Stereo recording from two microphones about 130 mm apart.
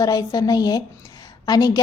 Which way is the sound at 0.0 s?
30° left (ahead or behind).